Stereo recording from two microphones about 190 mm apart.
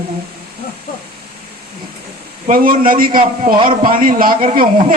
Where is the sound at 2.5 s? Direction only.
50° right (ahead or behind).